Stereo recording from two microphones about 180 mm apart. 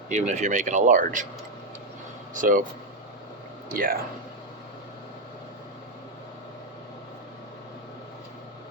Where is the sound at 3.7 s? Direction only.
55° right (ahead or behind).